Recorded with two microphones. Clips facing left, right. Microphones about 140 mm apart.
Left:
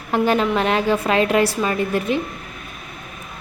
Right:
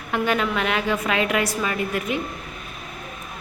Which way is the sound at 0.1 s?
35° left (ahead or behind).